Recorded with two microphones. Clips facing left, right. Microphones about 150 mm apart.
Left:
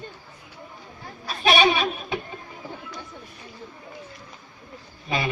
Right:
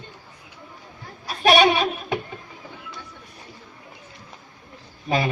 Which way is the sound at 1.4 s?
40° right (ahead or behind).